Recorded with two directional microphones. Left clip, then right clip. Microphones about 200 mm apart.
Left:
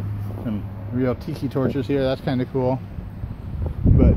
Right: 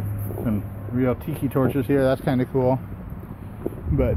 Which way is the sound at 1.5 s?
5° right (ahead or behind).